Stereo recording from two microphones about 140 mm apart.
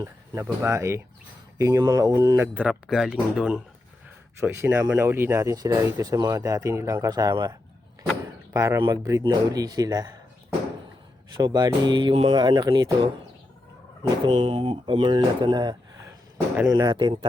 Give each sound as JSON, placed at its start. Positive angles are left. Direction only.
{"t": 0.0, "sound": "speech", "side_deg": -20}
{"t": 2.6, "sound": "speech", "side_deg": -5}
{"t": 4.4, "sound": "speech", "side_deg": -20}
{"t": 8.5, "sound": "speech", "side_deg": -25}
{"t": 11.3, "sound": "speech", "side_deg": -30}
{"t": 14.3, "sound": "speech", "side_deg": -40}